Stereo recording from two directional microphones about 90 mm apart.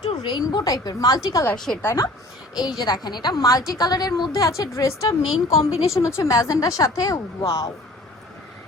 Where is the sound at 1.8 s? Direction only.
30° left (ahead or behind).